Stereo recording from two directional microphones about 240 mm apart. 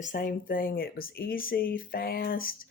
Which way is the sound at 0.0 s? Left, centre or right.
Left.